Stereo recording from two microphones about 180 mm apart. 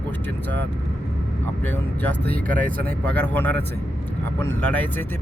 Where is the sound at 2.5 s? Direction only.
50° right (ahead or behind).